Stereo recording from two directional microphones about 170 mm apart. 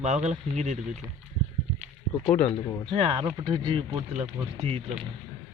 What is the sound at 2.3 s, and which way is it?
Speech, 5° left (ahead or behind).